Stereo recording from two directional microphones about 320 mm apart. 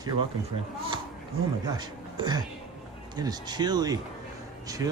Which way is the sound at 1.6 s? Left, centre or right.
Centre.